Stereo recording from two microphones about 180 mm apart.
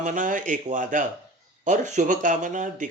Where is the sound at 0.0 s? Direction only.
45° right (ahead or behind).